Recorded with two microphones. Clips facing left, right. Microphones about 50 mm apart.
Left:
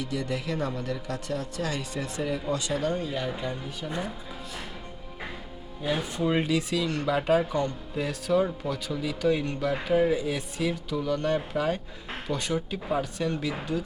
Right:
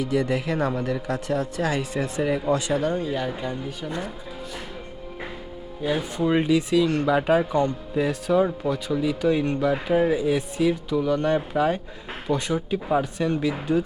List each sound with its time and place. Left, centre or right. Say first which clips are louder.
0.0 s speech: right 7 dB; centre
5.8 s speech: right 4 dB; centre